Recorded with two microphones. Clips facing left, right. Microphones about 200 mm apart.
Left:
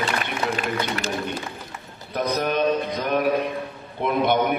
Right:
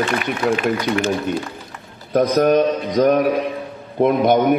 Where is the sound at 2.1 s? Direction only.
45° right (ahead or behind).